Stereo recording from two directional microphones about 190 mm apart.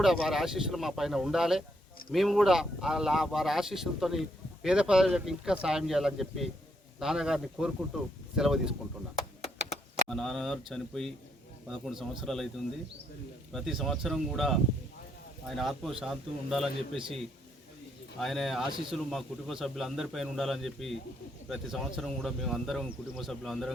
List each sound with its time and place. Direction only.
0.0 s speech: centre (ahead or behind)
10.1 s speech: centre (ahead or behind)
13.5 s speech: centre (ahead or behind)
18.2 s speech: centre (ahead or behind)